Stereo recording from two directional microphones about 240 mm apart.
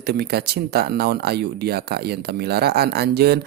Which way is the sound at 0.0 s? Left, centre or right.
Right.